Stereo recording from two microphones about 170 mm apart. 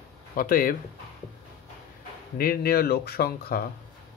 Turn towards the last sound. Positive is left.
turn(degrees=65)  # may be behind; listen again after turning